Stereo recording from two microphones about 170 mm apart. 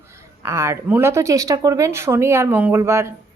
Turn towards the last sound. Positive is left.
turn(degrees=-15)  # may be behind; listen again after turning